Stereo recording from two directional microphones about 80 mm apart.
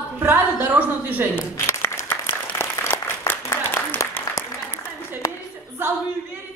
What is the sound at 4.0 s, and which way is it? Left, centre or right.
Applause, left.